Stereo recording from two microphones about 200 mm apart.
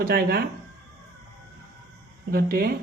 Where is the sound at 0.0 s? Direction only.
50° right (ahead or behind).